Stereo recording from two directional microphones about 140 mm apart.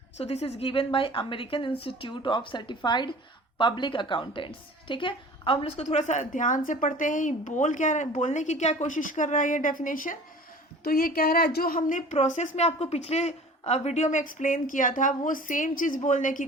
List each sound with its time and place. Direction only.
0.2 s a woman's voice: 45° left (ahead or behind); by 10.2 s 75° left (ahead or behind)
10.8 s a woman's voice: 90° left; by 12.0 s 75° left (ahead or behind)
12.1 s a woman's voice: 55° left (ahead or behind)